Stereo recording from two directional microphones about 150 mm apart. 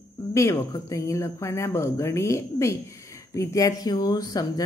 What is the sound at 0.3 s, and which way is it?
Speech, 20° left (ahead or behind).